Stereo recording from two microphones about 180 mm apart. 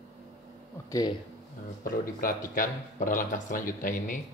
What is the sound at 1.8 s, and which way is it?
Speech, 50° left (ahead or behind).